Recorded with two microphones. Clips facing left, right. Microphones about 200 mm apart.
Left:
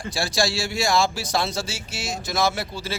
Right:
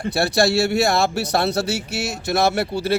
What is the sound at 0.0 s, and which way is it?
Speech, 60° right (ahead or behind).